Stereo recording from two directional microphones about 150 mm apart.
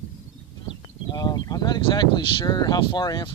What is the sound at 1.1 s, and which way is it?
Speech, 30° left (ahead or behind).